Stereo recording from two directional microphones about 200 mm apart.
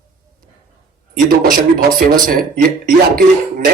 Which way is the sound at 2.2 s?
45° right (ahead or behind).